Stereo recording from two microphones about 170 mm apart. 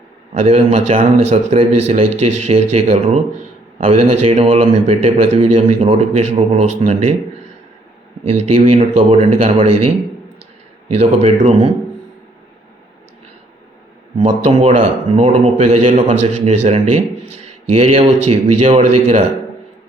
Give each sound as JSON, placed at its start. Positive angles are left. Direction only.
{"t": 0.3, "sound": "speech", "side_deg": -40}
{"t": 8.2, "sound": "speech", "side_deg": -40}
{"t": 14.2, "sound": "speech", "side_deg": -40}